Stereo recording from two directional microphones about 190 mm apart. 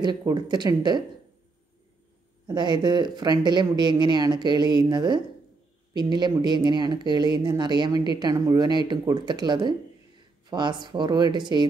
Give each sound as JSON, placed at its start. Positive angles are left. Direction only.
{"t": 0.0, "sound": "speech", "side_deg": -20}
{"t": 2.4, "sound": "speech", "side_deg": -25}